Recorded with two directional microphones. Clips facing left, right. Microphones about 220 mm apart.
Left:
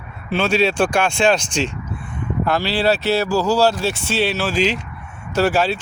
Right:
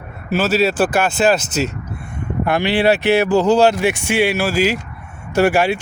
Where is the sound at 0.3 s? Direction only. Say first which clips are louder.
Right 2 dB; 5° right (ahead or behind).